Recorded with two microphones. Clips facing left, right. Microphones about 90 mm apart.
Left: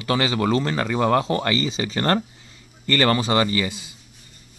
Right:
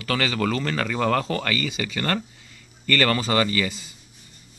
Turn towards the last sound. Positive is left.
turn(degrees=15)  # may be behind; listen again after turning